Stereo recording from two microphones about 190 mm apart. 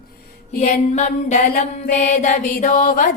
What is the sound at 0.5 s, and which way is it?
Mantra, 40° left (ahead or behind).